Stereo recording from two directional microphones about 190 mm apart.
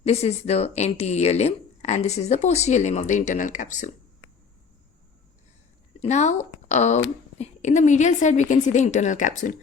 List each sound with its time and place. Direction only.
0.0 s speech: 35° left (ahead or behind)
6.0 s speech: 35° left (ahead or behind)